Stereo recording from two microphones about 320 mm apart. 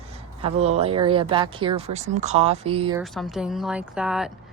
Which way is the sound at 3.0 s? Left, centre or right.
Centre.